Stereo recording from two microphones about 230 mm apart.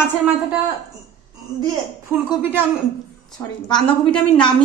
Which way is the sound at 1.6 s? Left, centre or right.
Centre.